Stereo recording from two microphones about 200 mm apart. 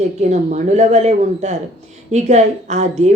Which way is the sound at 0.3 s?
35° right (ahead or behind).